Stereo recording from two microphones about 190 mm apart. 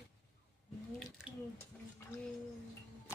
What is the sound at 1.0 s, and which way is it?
Drip, 5° right (ahead or behind).